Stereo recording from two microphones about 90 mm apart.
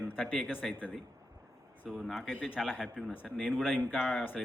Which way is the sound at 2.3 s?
15° left (ahead or behind).